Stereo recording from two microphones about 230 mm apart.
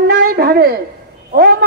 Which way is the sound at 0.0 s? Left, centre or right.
Right.